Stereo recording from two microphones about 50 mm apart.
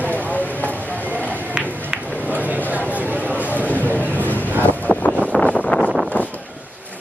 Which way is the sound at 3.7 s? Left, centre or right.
Left.